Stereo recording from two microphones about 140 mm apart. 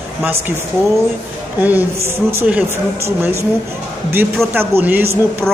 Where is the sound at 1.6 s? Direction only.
10° right (ahead or behind).